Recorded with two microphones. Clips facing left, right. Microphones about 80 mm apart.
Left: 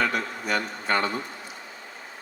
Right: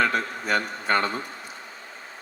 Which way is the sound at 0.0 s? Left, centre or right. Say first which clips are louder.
Right 2 dB; right.